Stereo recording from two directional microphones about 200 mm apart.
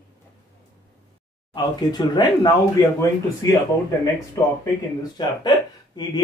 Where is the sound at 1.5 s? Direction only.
20° left (ahead or behind).